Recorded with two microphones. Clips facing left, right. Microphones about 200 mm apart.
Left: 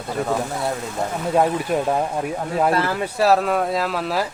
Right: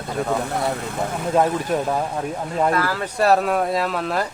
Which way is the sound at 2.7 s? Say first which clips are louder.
Left 1 dB; 25° left (ahead or behind).